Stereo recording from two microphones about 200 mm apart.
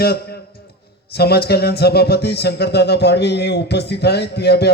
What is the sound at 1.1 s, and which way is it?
Speech, 50° left (ahead or behind).